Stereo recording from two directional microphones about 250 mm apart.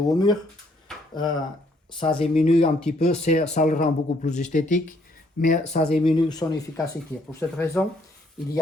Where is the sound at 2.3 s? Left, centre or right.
Left.